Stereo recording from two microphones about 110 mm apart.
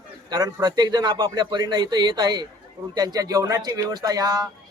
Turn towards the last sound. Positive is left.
turn(degrees=-35)  # may be behind; listen again after turning